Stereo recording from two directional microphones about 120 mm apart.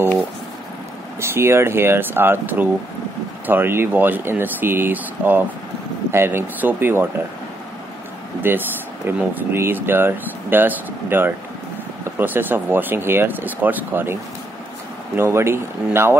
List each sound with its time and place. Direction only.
1.2 s speech: 20° right (ahead or behind)
8.4 s speech: 15° right (ahead or behind)
15.1 s speech: 20° right (ahead or behind)